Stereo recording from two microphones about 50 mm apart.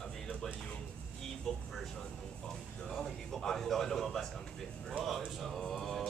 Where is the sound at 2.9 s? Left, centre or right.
Centre.